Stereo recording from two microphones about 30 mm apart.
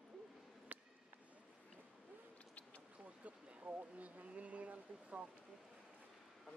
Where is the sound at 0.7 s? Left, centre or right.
Right.